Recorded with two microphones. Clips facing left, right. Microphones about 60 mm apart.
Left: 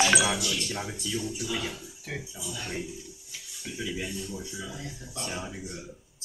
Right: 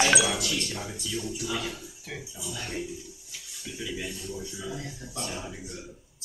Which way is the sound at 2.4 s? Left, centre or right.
Centre.